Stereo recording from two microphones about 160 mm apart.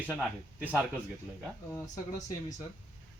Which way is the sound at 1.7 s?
15° left (ahead or behind).